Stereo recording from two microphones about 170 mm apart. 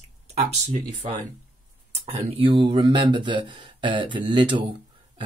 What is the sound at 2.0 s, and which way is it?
Speech, 35° right (ahead or behind).